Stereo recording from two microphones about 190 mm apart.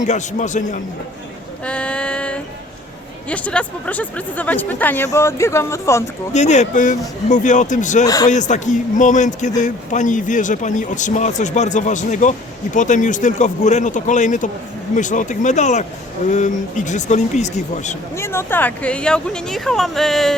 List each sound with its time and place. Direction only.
0.0 s speech: 40° left (ahead or behind)
1.6 s speech: 5° left (ahead or behind)
6.3 s speech: 40° left (ahead or behind)
8.0 s speech: 20° left (ahead or behind)
8.3 s speech: 40° left (ahead or behind)
18.2 s speech: 15° left (ahead or behind)